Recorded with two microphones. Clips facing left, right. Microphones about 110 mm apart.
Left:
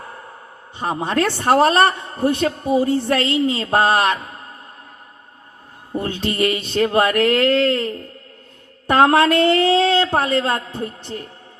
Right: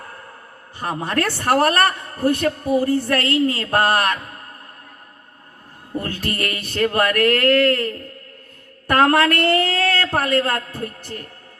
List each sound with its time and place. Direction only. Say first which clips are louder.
0.8 s a man's voice: left 3 dB; 25° left (ahead or behind)
5.9 s a man's voice: left 3 dB; 25° left (ahead or behind)